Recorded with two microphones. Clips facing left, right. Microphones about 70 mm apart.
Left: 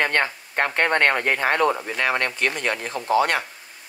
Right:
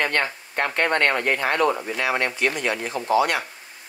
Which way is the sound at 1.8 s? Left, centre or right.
Left.